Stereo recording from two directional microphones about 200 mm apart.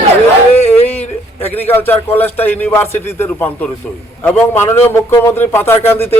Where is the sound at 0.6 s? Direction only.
30° left (ahead or behind).